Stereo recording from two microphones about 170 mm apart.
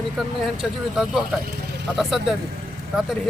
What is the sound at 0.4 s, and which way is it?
Speech, 5° right (ahead or behind).